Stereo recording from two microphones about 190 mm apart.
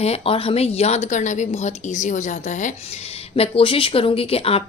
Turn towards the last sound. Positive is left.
turn(degrees=30)  # may be behind; listen again after turning